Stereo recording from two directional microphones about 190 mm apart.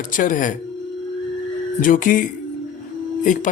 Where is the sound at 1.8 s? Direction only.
45° left (ahead or behind).